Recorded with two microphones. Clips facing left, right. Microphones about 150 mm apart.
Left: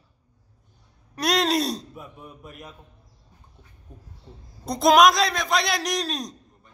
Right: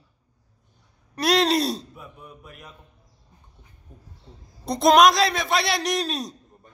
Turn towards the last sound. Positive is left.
turn(degrees=0)  # may be behind; listen again after turning